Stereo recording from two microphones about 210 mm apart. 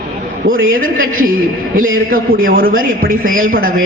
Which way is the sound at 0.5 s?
70° right (ahead or behind).